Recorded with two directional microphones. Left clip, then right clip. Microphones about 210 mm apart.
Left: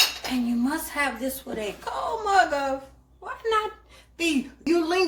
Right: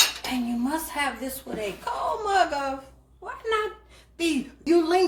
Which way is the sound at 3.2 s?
15° left (ahead or behind).